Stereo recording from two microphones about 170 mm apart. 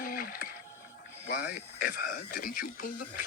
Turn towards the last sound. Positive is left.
turn(degrees=60)  # may be behind; listen again after turning